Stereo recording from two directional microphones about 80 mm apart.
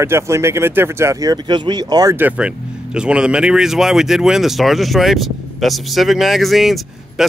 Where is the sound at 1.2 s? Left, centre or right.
Right.